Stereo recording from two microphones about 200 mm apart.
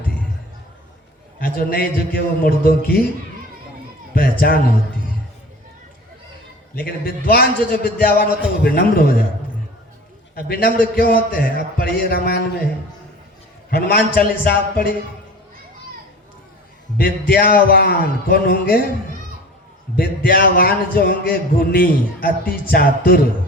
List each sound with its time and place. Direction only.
1.4 s a man's voice: 50° left (ahead or behind)
4.1 s a man's voice: 45° left (ahead or behind)
6.7 s a man's voice: 50° left (ahead or behind)
10.3 s a man's voice: 50° left (ahead or behind)
13.7 s a man's voice: 50° left (ahead or behind)
17.0 s a man's voice: 50° left (ahead or behind)
20.0 s a man's voice: 45° left (ahead or behind)